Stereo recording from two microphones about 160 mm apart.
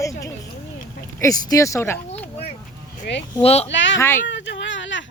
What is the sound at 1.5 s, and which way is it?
Speech, 20° left (ahead or behind).